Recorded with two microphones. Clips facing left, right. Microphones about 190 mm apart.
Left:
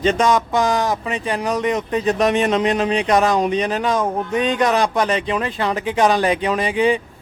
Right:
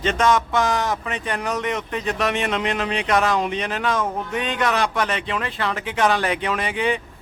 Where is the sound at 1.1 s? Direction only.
30° left (ahead or behind).